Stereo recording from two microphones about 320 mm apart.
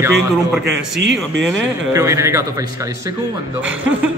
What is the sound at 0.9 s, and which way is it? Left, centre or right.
Speech, right.